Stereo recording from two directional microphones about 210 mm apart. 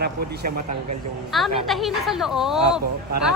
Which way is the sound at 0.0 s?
45° right (ahead or behind).